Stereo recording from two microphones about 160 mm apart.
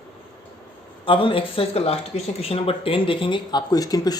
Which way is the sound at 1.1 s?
30° left (ahead or behind).